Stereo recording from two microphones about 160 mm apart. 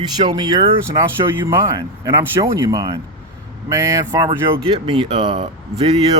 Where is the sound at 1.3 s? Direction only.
15° right (ahead or behind).